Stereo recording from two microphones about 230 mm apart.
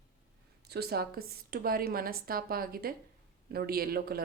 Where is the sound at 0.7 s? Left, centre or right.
Right.